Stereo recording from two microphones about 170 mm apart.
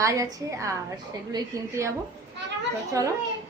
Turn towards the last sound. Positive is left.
turn(degrees=-20)  # may be behind; listen again after turning